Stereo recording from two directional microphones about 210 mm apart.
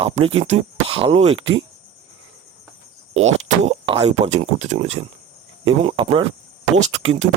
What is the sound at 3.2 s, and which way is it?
Speech, 30° right (ahead or behind).